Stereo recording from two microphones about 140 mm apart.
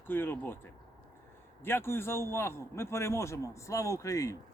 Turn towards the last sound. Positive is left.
turn(degrees=20)  # may be behind; listen again after turning